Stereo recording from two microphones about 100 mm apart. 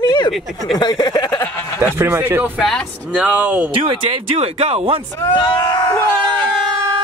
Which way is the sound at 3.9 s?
70° right (ahead or behind).